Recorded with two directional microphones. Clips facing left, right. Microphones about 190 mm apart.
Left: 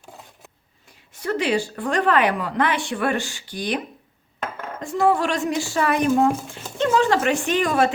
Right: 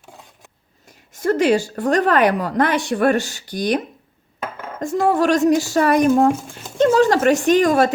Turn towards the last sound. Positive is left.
turn(degrees=-40)  # may be behind; listen again after turning